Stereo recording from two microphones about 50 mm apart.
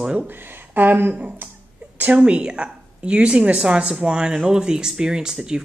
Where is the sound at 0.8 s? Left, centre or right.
Right.